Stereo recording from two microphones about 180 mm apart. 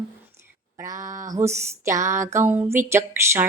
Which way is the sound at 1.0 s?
45° right (ahead or behind).